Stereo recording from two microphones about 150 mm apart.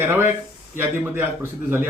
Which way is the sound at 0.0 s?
15° right (ahead or behind).